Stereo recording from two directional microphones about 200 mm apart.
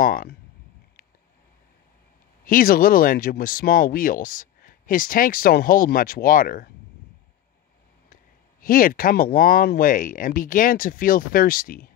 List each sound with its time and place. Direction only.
0.0 s speech: 45° left (ahead or behind)
2.4 s speech: 45° left (ahead or behind)
8.1 s speech: 45° left (ahead or behind)